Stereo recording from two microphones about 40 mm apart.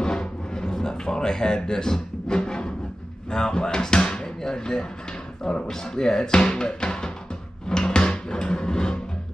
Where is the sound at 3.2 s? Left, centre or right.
Centre.